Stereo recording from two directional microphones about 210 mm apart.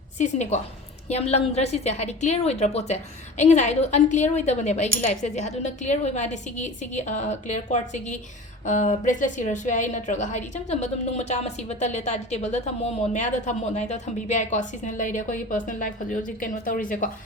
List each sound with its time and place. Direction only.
0.2 s a woman's voice: 35° left (ahead or behind)